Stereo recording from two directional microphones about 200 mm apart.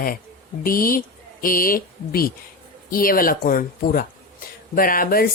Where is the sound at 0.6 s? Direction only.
45° left (ahead or behind).